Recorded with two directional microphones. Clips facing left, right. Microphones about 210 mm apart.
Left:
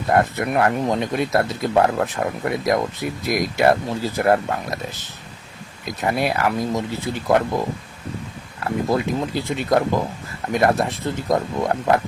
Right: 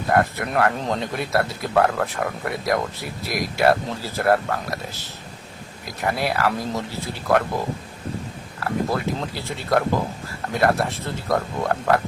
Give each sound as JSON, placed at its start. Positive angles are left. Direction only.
{"t": 0.1, "sound": "speech", "side_deg": 20}
{"t": 8.6, "sound": "speech", "side_deg": 20}